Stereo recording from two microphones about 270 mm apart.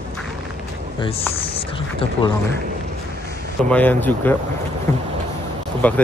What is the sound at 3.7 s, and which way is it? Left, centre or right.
Speech, centre.